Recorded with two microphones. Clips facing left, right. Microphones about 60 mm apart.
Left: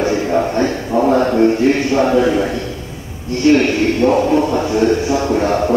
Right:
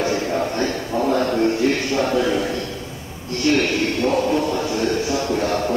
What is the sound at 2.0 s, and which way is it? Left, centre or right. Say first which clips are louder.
Speech: left 6 dB; left.